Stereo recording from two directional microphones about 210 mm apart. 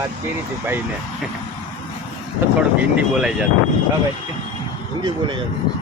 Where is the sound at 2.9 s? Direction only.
5° right (ahead or behind).